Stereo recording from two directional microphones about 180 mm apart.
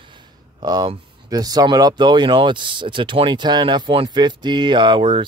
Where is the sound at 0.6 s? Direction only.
25° right (ahead or behind).